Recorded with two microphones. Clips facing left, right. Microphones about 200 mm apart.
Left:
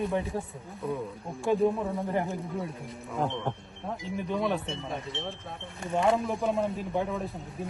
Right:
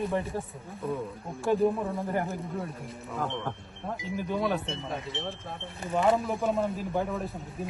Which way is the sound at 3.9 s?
Centre (ahead or behind).